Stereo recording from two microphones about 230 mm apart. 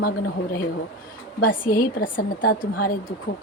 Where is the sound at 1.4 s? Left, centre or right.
Left.